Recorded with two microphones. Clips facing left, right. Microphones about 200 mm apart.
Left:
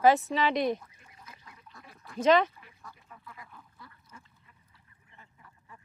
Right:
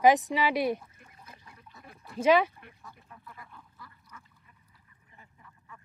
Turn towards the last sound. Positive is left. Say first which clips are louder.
# even
turn(degrees=30)  # may be behind; listen again after turning